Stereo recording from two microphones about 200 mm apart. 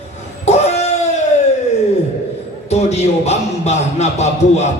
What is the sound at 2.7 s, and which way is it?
A man's voice, 35° left (ahead or behind).